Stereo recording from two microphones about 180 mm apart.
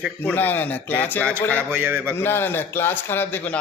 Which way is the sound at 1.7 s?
10° right (ahead or behind).